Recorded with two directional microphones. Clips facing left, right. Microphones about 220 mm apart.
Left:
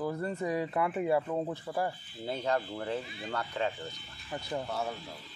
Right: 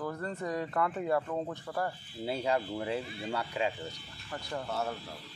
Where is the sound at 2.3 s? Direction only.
10° right (ahead or behind).